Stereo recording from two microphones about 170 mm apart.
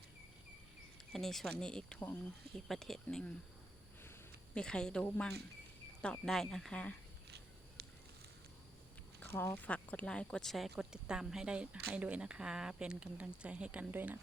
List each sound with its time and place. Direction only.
1.1 s speech: centre (ahead or behind)
4.5 s speech: 5° left (ahead or behind)
7.8 s a sound: 75° right (ahead or behind)
9.2 s speech: 10° left (ahead or behind); by 14.2 s 10° right (ahead or behind)